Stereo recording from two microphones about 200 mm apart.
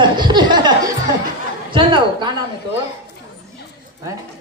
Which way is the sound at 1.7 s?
25° right (ahead or behind).